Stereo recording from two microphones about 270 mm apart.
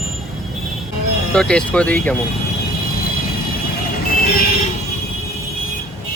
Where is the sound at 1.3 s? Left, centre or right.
Centre.